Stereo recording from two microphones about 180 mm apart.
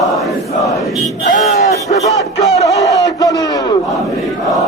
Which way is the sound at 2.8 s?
20° left (ahead or behind).